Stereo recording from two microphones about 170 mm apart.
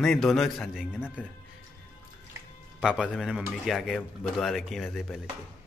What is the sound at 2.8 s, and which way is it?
Speech, 5° right (ahead or behind).